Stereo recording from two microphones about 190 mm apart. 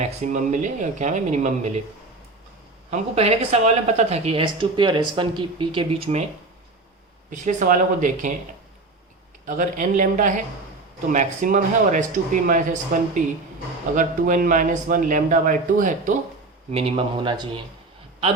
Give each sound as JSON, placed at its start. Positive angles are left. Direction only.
{"t": 0.0, "sound": "speech", "side_deg": -40}
{"t": 2.9, "sound": "speech", "side_deg": -35}
{"t": 7.3, "sound": "a man's voice", "side_deg": -40}
{"t": 9.5, "sound": "a man's voice", "side_deg": -40}
{"t": 16.7, "sound": "speech", "side_deg": -30}